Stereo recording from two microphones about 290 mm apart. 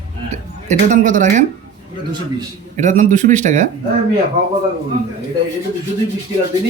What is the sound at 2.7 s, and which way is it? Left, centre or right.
Speech, right.